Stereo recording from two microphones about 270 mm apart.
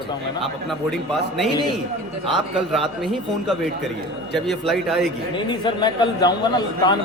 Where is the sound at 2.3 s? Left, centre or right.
Centre.